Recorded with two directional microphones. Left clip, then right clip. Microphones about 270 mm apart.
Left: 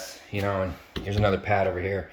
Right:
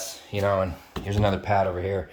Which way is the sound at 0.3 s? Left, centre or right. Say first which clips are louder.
Right 4 dB; centre.